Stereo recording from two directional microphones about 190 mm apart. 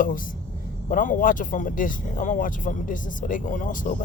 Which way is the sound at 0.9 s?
45° left (ahead or behind).